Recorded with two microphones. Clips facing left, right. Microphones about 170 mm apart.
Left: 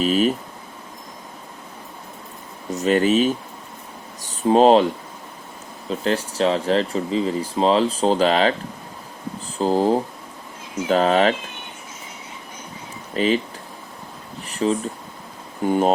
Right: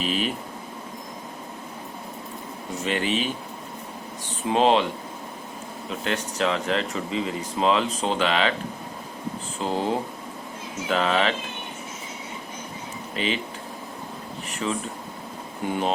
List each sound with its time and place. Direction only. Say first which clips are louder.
0.0 s speech: left 8 dB; 40° left (ahead or behind)
2.7 s speech: left 8 dB; 40° left (ahead or behind)
5.9 s speech: left 6 dB; 30° left (ahead or behind)
9.6 s speech: left 8 dB; 35° left (ahead or behind)
13.1 s speech: left 8 dB; 40° left (ahead or behind)
14.5 s speech: left 7 dB; 35° left (ahead or behind)